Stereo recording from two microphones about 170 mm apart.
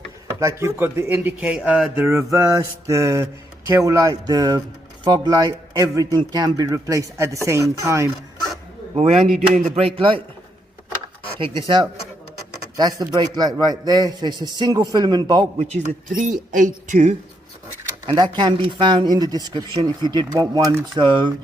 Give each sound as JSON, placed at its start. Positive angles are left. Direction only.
{"t": 0.3, "sound": "a man's voice", "side_deg": -15}
{"t": 9.0, "sound": "a man's voice", "side_deg": -40}
{"t": 11.3, "sound": "a man's voice", "side_deg": -30}
{"t": 15.5, "sound": "speech", "side_deg": -40}
{"t": 18.0, "sound": "a man's voice", "side_deg": -30}